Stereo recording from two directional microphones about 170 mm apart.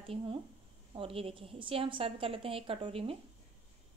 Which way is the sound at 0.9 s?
35° right (ahead or behind).